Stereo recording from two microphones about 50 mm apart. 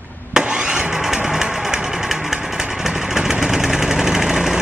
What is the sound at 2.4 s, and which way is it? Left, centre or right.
Vehicle, centre.